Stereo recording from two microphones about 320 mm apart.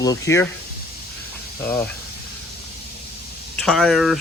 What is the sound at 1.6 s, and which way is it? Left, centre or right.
Speech, centre.